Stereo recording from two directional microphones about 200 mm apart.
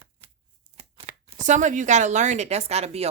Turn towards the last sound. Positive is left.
turn(degrees=-30)  # may be behind; listen again after turning